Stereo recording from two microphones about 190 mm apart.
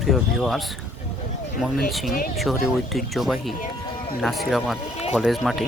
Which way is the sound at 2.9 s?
Centre (ahead or behind).